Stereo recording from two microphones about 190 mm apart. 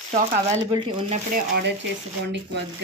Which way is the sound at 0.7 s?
25° right (ahead or behind).